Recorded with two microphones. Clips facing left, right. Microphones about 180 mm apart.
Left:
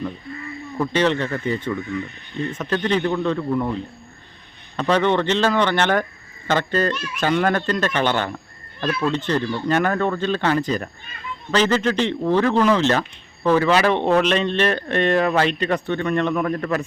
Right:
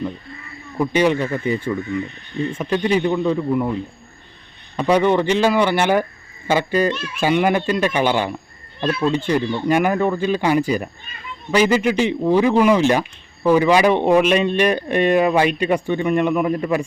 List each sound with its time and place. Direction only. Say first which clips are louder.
0.8 s a man's voice: right 3 dB; 10° right (ahead or behind)
4.8 s a man's voice: right 3 dB; 10° right (ahead or behind)
8.8 s a man's voice: right 3 dB; 25° right (ahead or behind)